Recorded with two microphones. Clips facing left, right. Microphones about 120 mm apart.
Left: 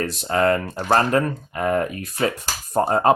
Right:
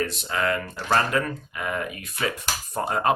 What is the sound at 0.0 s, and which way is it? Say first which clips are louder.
Speech: left 6 dB; 40° left (ahead or behind).